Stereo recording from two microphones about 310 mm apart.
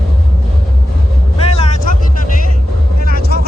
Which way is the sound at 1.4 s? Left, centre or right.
Centre.